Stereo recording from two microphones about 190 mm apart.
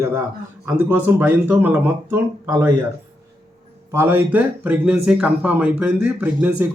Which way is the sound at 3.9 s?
10° right (ahead or behind).